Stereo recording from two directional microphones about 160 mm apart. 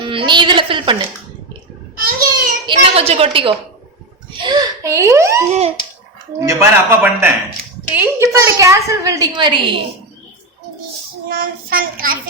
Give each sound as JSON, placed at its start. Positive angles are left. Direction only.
{"t": 0.0, "sound": "a woman's voice", "side_deg": -30}
{"t": 2.0, "sound": "child singing", "side_deg": -65}
{"t": 2.6, "sound": "a woman's voice", "side_deg": -35}
{"t": 5.5, "sound": "speech", "side_deg": -40}
{"t": 6.4, "sound": "a man's voice", "side_deg": -15}
{"t": 11.3, "sound": "child singing", "side_deg": -65}